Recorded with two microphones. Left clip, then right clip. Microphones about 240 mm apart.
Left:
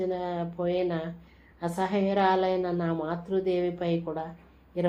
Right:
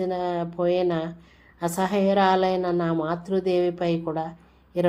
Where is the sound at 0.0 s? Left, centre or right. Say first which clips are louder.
Right 4 dB; right.